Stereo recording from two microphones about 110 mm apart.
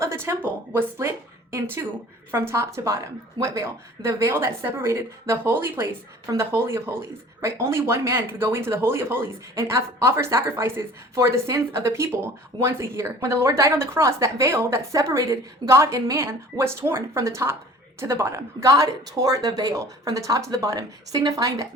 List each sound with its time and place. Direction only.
0.0 s speech: 25° right (ahead or behind)